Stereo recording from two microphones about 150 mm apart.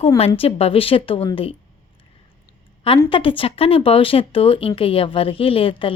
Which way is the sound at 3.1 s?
35° left (ahead or behind).